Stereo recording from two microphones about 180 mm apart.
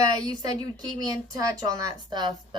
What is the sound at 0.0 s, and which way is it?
A woman's voice, 20° right (ahead or behind).